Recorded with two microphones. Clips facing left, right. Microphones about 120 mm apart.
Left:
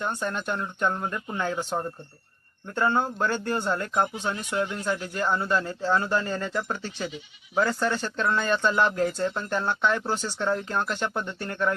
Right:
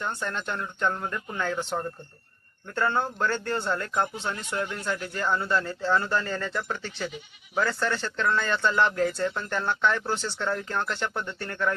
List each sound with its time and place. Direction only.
0.0 s speech: 15° left (ahead or behind)